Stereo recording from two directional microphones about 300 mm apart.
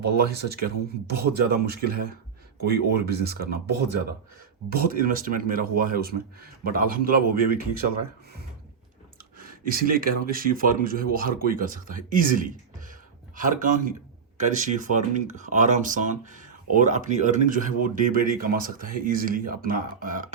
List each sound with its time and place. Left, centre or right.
0.0 s speech: right
4.7 s speech: right
9.4 s speech: right